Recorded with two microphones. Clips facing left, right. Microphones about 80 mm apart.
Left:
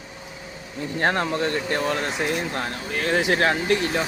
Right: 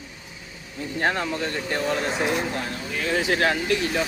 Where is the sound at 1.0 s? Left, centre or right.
Left.